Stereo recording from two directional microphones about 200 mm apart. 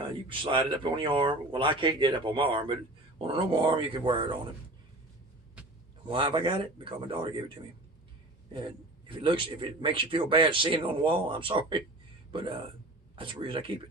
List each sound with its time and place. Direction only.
0.0 s a man's voice: 25° right (ahead or behind)
6.1 s a man's voice: 25° right (ahead or behind)
8.5 s a man's voice: 25° right (ahead or behind)